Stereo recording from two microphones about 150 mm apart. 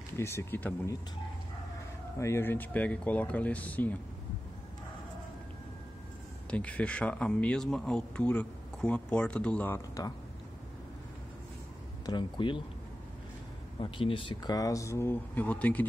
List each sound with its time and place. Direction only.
0.2 s speech: 15° left (ahead or behind)
2.1 s speech: 20° left (ahead or behind)
6.5 s speech: 10° left (ahead or behind)
9.8 s speech: 25° left (ahead or behind)
12.1 s speech: 30° left (ahead or behind)
13.7 s speech: 35° left (ahead or behind); by 15.8 s 10° left (ahead or behind)